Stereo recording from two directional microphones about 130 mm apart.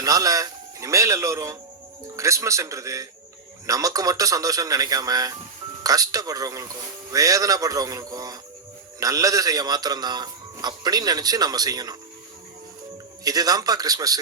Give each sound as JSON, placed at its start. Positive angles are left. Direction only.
{"t": 0.0, "sound": "a man's voice", "side_deg": -25}
{"t": 13.2, "sound": "speech", "side_deg": -30}